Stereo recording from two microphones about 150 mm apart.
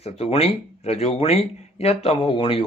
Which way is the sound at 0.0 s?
40° left (ahead or behind).